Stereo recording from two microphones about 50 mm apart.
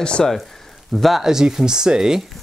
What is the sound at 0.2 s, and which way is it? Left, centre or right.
Speech, centre.